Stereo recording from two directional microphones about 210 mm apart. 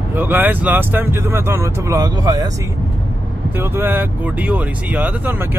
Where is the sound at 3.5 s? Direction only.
10° right (ahead or behind).